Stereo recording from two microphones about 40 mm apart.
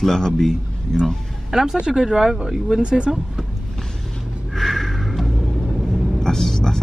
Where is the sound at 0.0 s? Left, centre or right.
Centre.